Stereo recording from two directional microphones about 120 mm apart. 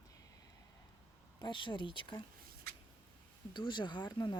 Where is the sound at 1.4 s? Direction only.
40° left (ahead or behind).